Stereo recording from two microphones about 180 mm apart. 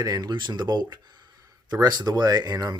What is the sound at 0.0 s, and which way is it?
Speech, 20° right (ahead or behind).